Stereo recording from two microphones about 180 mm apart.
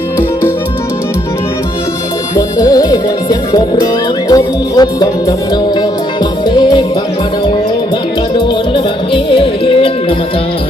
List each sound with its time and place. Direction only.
2.3 s music: 20° left (ahead or behind)
6.6 s music: 25° left (ahead or behind)
8.7 s music: 30° left (ahead or behind)